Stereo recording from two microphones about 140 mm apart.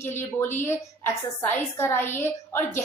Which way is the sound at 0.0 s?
15° left (ahead or behind).